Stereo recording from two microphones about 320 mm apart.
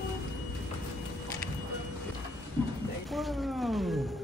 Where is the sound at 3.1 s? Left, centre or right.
Centre.